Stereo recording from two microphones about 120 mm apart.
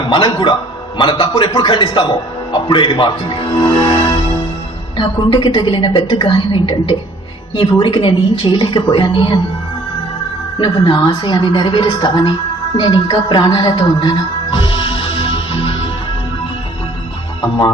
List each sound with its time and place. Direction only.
0.1 s a man's voice: 40° left (ahead or behind)
3.9 s music: 45° left (ahead or behind)
4.9 s a woman's voice: 40° left (ahead or behind)
10.6 s a man's voice: 40° left (ahead or behind)
12.8 s music: 40° left (ahead or behind)